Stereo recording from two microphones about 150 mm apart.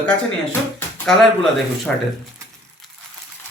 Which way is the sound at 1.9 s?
5° left (ahead or behind).